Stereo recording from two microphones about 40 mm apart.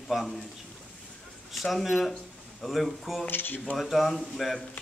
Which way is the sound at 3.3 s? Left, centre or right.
Left.